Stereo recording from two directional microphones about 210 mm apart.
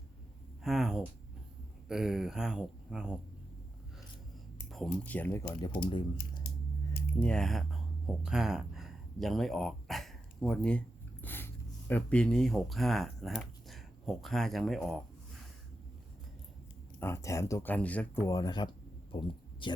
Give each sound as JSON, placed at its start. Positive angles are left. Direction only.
{"t": 0.6, "sound": "speech", "side_deg": 0}
{"t": 4.7, "sound": "speech", "side_deg": 0}
{"t": 7.2, "sound": "speech", "side_deg": 5}
{"t": 17.0, "sound": "speech", "side_deg": 15}